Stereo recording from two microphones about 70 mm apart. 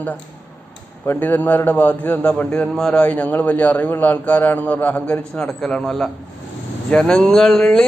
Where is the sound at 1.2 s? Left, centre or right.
Left.